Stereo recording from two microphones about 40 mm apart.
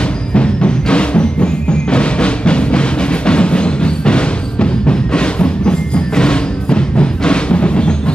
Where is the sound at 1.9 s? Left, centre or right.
Left.